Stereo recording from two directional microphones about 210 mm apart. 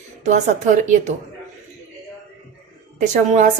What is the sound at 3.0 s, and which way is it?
Speech, 35° right (ahead or behind).